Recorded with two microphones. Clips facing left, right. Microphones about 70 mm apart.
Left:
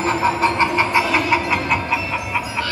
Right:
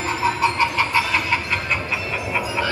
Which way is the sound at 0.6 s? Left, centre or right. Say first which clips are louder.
Left 3 dB; left.